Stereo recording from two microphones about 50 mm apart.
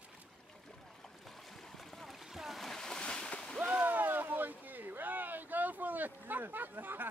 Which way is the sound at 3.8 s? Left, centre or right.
Right.